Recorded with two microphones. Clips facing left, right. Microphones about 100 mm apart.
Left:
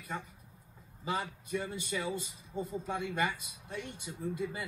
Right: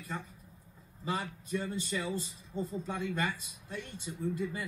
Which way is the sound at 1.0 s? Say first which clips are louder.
Even; 15° left (ahead or behind).